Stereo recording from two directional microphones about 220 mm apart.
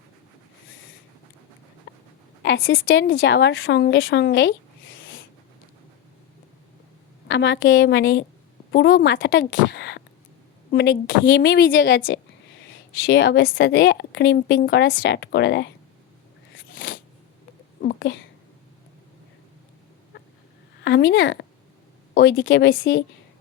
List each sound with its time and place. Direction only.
1.9 s dog: 50° left (ahead or behind)
2.4 s a woman's voice: 55° left (ahead or behind)
7.3 s a woman's voice: 55° left (ahead or behind)
16.7 s a sound: 40° left (ahead or behind)
17.7 s a sound: 50° left (ahead or behind)
20.8 s a woman's voice: 50° left (ahead or behind)